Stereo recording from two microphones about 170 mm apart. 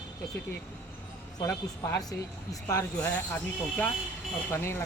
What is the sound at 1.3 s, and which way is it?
A man's voice, 20° left (ahead or behind).